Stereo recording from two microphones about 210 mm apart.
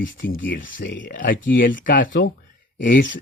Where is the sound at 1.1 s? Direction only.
40° left (ahead or behind).